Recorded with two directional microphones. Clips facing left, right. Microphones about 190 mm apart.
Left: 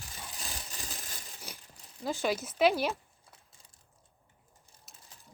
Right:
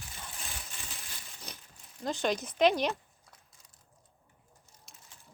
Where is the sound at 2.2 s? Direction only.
5° left (ahead or behind).